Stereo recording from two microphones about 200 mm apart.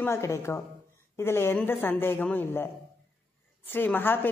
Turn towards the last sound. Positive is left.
turn(degrees=10)  # may be behind; listen again after turning